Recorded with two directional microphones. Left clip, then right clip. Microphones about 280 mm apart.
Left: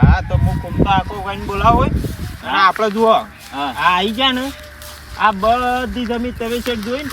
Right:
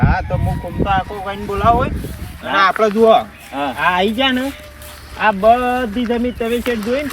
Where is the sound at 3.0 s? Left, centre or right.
Centre.